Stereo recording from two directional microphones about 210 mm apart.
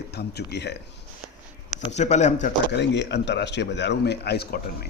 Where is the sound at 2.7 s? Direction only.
55° left (ahead or behind).